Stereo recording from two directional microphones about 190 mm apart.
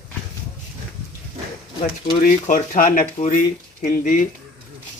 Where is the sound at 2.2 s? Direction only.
45° left (ahead or behind).